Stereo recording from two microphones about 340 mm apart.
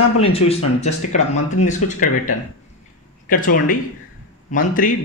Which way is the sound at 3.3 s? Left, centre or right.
Left.